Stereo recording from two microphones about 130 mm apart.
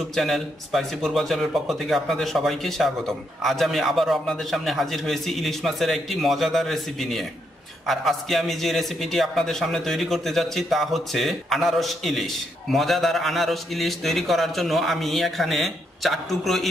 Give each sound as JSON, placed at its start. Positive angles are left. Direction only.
{"t": 0.1, "sound": "a man's voice", "side_deg": 0}